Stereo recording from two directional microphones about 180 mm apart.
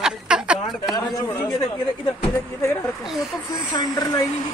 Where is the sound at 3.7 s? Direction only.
20° left (ahead or behind).